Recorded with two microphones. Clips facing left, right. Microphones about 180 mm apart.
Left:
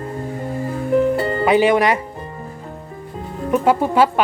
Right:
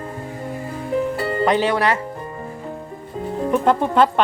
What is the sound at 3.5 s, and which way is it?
Speech, 5° left (ahead or behind).